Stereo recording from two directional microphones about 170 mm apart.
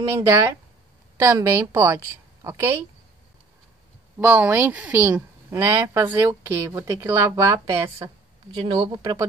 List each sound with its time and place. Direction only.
0.1 s a woman's voice: 15° right (ahead or behind)
4.2 s speech: 10° right (ahead or behind)
8.7 s a woman's voice: 25° right (ahead or behind)